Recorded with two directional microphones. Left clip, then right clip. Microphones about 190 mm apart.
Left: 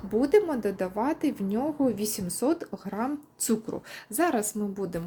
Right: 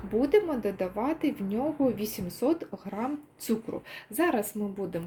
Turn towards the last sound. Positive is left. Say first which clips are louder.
# left 1 dB
turn(degrees=15)  # may be behind; listen again after turning